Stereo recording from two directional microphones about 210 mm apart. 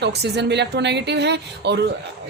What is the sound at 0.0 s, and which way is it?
A woman's voice, 55° right (ahead or behind).